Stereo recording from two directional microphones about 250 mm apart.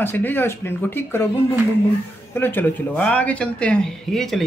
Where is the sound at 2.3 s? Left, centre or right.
Centre.